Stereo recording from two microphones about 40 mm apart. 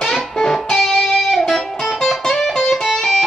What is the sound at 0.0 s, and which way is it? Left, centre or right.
Music, centre.